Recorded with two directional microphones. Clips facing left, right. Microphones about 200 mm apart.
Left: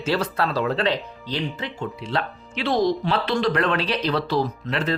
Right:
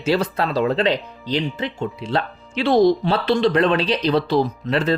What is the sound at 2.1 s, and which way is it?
Speech, 30° right (ahead or behind).